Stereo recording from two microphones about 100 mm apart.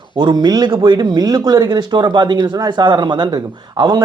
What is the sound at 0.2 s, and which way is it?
Speech, 45° right (ahead or behind).